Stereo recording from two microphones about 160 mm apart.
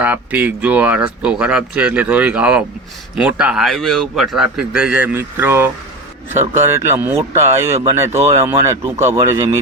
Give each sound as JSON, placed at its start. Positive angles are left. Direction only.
{"t": 0.0, "sound": "a man's voice", "side_deg": -10}